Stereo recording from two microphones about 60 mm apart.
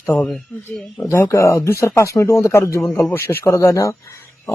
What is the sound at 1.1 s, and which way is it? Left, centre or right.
Speech, left.